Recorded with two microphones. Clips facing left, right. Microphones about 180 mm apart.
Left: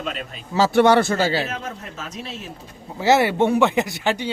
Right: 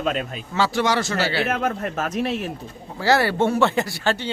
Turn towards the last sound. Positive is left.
turn(degrees=15)  # may be behind; listen again after turning